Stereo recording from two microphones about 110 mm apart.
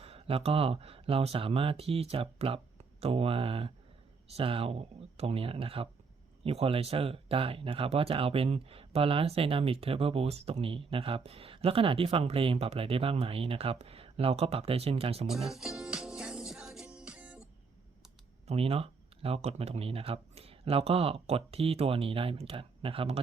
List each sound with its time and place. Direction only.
0.0 s speech: 65° right (ahead or behind)
15.3 s music: 5° right (ahead or behind)
18.4 s speech: 65° right (ahead or behind)